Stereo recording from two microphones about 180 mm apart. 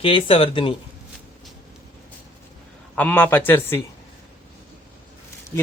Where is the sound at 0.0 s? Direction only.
30° left (ahead or behind).